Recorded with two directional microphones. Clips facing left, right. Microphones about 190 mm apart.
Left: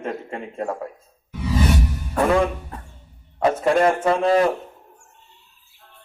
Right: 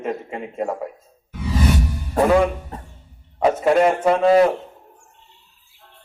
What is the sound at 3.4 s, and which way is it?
A man's voice, 10° right (ahead or behind).